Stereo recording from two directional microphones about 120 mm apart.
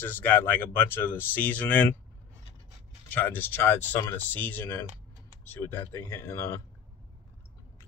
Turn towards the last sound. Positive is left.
turn(degrees=25)  # may be behind; listen again after turning